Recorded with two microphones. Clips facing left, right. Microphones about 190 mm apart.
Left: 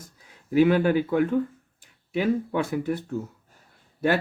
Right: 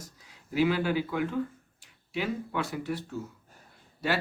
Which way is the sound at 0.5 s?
55° left (ahead or behind).